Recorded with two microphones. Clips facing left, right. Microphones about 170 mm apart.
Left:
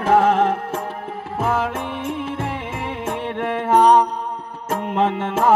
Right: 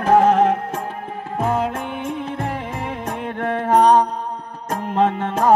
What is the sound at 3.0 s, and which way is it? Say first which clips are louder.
Music: left 1 dB; 35° right (ahead or behind).